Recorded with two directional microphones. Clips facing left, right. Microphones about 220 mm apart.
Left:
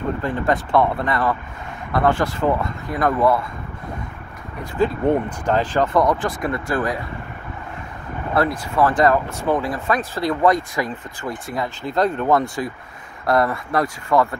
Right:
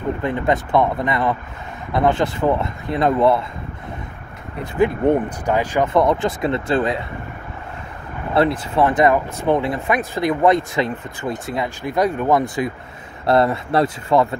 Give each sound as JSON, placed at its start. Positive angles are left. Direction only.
{"t": 0.2, "sound": "speech", "side_deg": -20}
{"t": 4.8, "sound": "speech", "side_deg": -20}
{"t": 8.4, "sound": "speech", "side_deg": -25}